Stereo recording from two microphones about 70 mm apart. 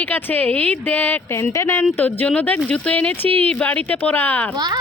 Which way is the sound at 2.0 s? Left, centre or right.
Left.